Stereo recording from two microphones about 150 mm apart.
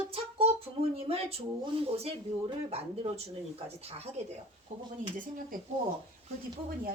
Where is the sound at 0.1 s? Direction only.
40° right (ahead or behind).